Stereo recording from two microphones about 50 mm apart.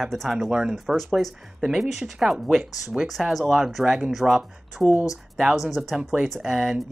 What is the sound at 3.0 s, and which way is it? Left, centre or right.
Speech, centre.